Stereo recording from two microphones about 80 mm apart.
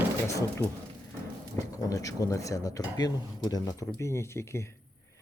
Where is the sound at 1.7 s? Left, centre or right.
Left.